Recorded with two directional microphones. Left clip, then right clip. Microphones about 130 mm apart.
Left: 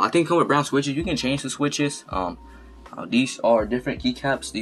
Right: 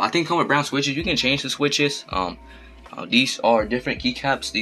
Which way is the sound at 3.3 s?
30° right (ahead or behind).